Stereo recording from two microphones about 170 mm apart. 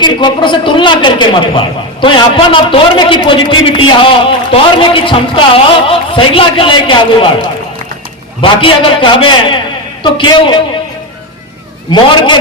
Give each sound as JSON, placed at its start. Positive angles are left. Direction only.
{"t": 0.0, "sound": "a man's voice", "side_deg": 25}
{"t": 8.4, "sound": "a man's voice", "side_deg": 30}
{"t": 11.9, "sound": "a man's voice", "side_deg": 25}